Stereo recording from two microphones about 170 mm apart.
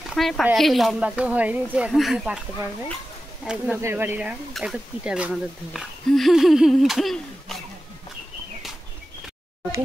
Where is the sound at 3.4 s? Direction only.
5° right (ahead or behind).